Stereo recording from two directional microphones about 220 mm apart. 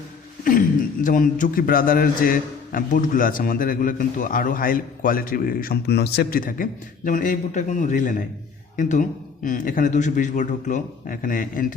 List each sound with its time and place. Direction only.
1.0 s a man's voice: 40° left (ahead or behind)